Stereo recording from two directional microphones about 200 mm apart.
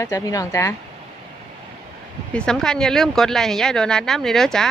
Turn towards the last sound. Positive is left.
turn(degrees=0)  # may be behind; listen again after turning